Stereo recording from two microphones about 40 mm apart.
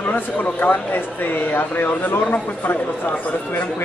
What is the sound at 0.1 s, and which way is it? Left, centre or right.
Speech, left.